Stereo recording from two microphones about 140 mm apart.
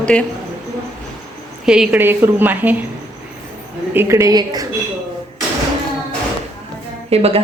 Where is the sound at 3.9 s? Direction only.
20° right (ahead or behind).